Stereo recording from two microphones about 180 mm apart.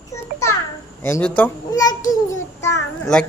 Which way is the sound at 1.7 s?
20° left (ahead or behind).